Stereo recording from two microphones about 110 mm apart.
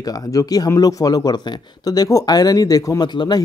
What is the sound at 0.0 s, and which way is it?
Speech, 35° left (ahead or behind).